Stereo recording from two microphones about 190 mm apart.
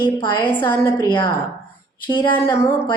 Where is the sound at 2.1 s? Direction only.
20° left (ahead or behind).